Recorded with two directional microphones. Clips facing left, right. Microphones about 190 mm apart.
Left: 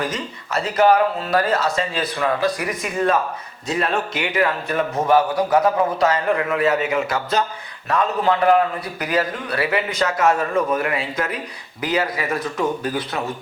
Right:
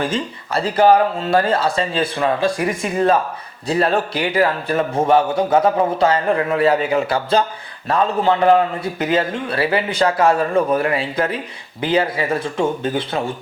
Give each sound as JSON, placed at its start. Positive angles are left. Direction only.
{"t": 0.0, "sound": "a man's voice", "side_deg": -30}